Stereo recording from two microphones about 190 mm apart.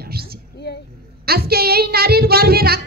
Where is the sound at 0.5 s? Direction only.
60° left (ahead or behind).